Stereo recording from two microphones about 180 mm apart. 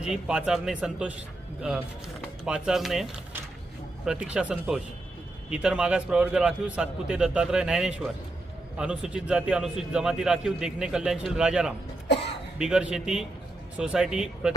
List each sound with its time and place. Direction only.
0.0 s a man's voice: 5° right (ahead or behind)
12.0 s a sound: 70° left (ahead or behind)
12.5 s a man's voice: 5° right (ahead or behind)